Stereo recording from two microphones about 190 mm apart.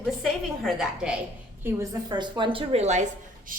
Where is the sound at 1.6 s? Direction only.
20° right (ahead or behind).